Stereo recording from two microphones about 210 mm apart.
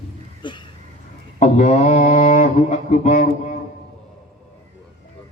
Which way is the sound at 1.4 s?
35° left (ahead or behind).